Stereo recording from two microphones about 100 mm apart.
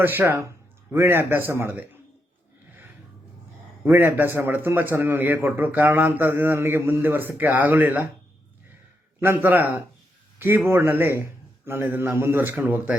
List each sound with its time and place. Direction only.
0.0 s a man's voice: 20° right (ahead or behind)
3.8 s a man's voice: 20° right (ahead or behind)
9.2 s a man's voice: 20° right (ahead or behind)